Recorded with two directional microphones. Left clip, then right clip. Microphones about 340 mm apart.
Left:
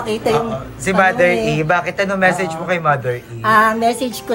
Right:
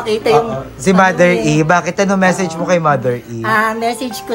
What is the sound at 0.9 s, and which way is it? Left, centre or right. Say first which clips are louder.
Speech: right 3 dB; centre.